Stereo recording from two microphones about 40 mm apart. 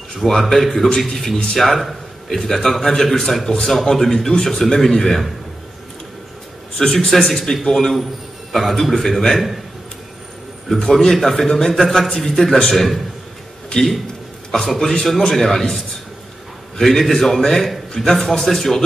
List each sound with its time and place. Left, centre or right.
0.1 s a man's voice: centre
6.8 s a man's voice: centre
7.1 s a man's voice: centre
10.7 s a man's voice: centre
14.5 s a man's voice: centre
16.8 s a man's voice: centre